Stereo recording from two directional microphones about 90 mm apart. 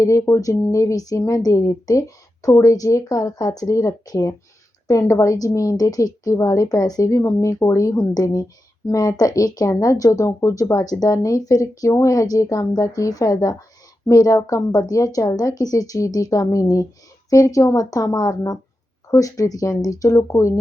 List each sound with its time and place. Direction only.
0.0 s speech: 35° left (ahead or behind)